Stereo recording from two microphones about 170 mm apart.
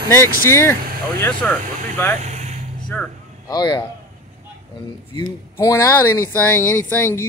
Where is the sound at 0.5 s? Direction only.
15° left (ahead or behind).